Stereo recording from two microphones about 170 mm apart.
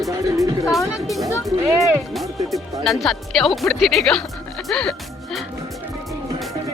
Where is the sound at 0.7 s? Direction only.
Centre (ahead or behind).